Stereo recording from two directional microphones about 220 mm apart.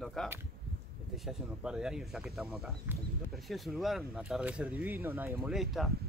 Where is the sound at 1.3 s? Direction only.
Centre (ahead or behind).